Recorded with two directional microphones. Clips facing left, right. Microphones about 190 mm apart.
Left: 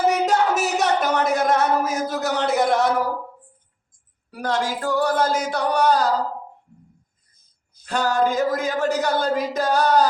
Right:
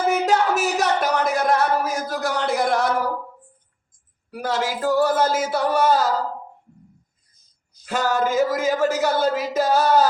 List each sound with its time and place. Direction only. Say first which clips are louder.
0.1 s a sound: even; centre (ahead or behind)
4.4 s speech: even; 5° right (ahead or behind)
7.9 s speech: left 1 dB; 5° right (ahead or behind)